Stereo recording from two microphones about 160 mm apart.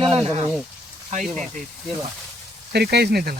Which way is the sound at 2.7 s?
90° right.